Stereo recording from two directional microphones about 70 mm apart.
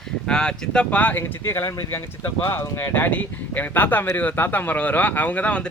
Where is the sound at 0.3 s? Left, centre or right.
Centre.